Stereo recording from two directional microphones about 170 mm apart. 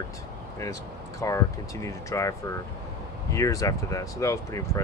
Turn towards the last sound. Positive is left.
turn(degrees=20)  # may be behind; listen again after turning